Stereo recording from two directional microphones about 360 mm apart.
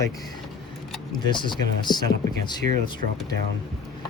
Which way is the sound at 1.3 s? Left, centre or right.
Centre.